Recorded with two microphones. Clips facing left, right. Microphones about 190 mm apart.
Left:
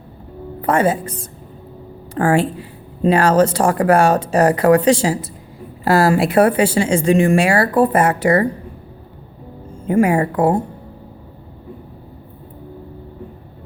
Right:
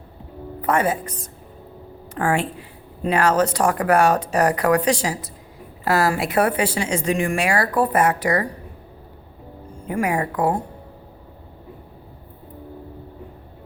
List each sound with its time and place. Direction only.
0.6 s a woman's voice: 30° left (ahead or behind)
9.8 s a woman's voice: 25° left (ahead or behind)